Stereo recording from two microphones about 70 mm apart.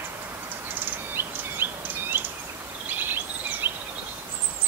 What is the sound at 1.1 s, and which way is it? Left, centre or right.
Insect, right.